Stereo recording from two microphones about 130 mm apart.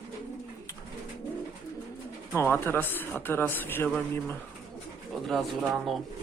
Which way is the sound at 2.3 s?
15° left (ahead or behind).